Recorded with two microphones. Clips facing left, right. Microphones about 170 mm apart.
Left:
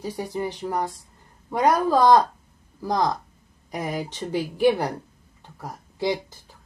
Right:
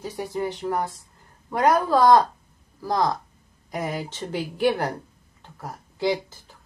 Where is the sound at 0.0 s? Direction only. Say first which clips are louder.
Even; 15° left (ahead or behind).